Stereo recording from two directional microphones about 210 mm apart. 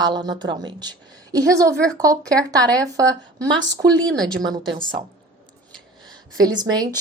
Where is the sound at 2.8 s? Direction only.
15° right (ahead or behind).